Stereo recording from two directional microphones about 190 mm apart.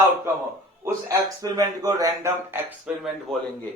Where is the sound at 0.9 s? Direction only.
15° right (ahead or behind).